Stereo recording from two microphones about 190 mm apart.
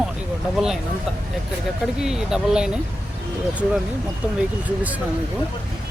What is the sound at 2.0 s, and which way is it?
Speech, 5° right (ahead or behind).